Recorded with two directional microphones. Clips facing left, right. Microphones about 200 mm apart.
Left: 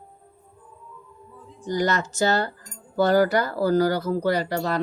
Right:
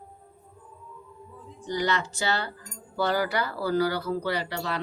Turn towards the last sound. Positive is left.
turn(degrees=45)  # may be behind; listen again after turning